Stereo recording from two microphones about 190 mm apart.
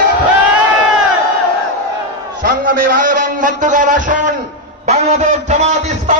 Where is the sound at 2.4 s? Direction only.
50° right (ahead or behind).